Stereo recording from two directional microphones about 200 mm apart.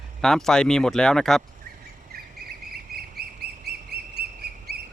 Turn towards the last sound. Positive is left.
turn(degrees=-55)  # may be behind; listen again after turning